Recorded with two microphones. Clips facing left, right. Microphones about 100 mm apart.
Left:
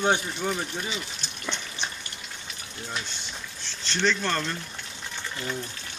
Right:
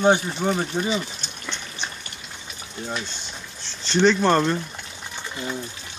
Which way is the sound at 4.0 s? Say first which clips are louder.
Right 9 dB; 35° right (ahead or behind).